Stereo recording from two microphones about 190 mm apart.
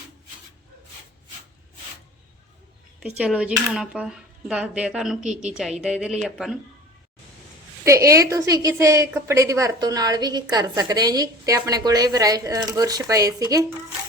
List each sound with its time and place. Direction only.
3.0 s speech: 5° right (ahead or behind)
7.9 s a woman's voice: 15° right (ahead or behind)